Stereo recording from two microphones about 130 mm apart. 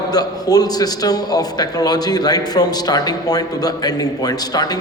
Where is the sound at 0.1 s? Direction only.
30° left (ahead or behind).